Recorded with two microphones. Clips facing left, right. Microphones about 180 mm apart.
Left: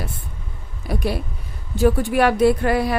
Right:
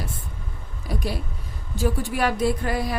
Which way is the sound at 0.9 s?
65° left (ahead or behind).